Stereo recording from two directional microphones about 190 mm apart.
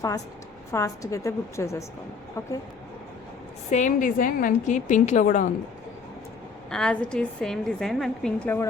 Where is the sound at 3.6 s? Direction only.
40° left (ahead or behind).